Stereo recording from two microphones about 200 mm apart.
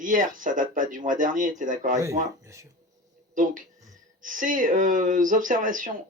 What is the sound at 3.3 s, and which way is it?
Speech, 40° right (ahead or behind).